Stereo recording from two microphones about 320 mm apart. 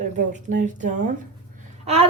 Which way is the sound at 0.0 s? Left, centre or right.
Right.